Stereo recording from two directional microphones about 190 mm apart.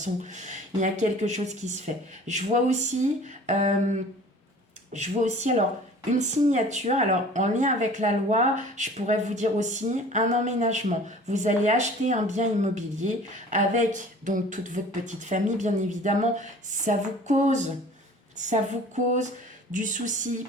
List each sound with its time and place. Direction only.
0.0 s speech: 40° right (ahead or behind)